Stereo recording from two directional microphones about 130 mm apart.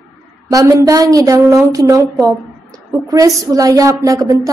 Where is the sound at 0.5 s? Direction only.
25° right (ahead or behind).